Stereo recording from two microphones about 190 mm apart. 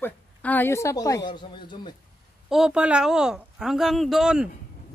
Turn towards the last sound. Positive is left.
turn(degrees=-5)  # may be behind; listen again after turning